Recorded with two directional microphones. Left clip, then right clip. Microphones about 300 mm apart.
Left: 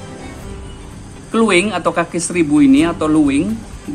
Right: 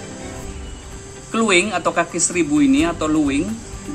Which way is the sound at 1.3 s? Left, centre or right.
Centre.